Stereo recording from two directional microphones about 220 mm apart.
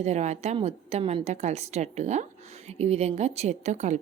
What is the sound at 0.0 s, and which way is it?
Speech, 30° right (ahead or behind).